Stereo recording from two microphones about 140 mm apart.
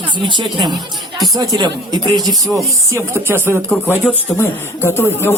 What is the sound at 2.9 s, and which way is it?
Speech, 15° right (ahead or behind).